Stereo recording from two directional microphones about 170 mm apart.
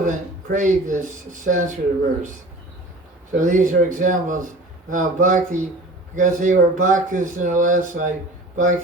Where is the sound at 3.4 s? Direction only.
50° right (ahead or behind).